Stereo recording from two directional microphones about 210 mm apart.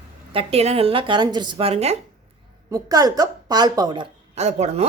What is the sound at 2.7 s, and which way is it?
A woman's voice, 15° right (ahead or behind).